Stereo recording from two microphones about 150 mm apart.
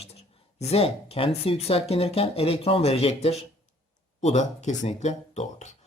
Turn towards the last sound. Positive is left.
turn(degrees=50)  # may be behind; listen again after turning